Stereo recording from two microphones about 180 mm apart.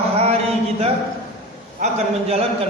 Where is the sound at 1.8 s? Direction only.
40° right (ahead or behind).